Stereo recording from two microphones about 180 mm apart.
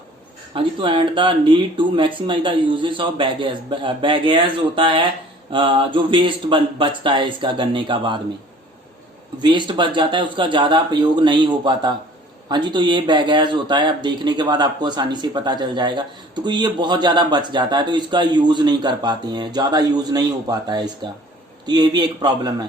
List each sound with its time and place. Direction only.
0.5 s speech: 30° right (ahead or behind)
9.4 s speech: 25° right (ahead or behind)